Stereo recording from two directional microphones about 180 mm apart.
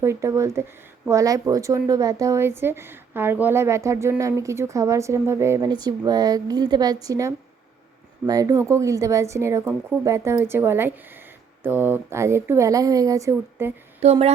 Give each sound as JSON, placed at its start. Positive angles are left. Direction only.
{"t": 0.0, "sound": "a woman's voice", "side_deg": -15}
{"t": 14.0, "sound": "speech", "side_deg": -35}